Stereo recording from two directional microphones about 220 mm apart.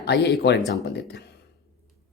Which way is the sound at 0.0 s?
50° left (ahead or behind).